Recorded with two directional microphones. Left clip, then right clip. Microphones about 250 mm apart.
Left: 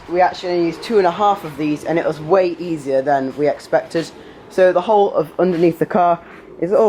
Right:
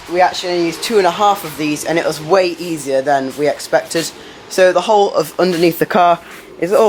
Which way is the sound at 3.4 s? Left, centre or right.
Centre.